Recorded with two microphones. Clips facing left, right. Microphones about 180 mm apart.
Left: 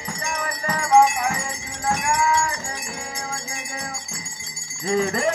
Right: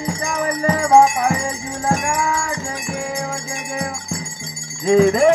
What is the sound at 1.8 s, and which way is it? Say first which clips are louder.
Wind chime: right 3 dB; 50° right (ahead or behind).